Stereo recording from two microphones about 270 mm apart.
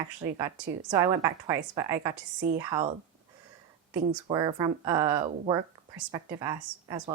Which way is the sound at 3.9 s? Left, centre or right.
Centre.